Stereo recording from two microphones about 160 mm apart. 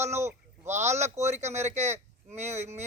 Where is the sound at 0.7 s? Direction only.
45° right (ahead or behind).